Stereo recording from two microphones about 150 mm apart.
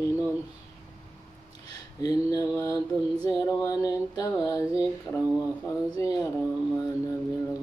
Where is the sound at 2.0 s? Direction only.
25° left (ahead or behind).